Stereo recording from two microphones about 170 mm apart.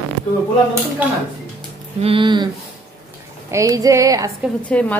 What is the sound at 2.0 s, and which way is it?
Speech, 30° right (ahead or behind).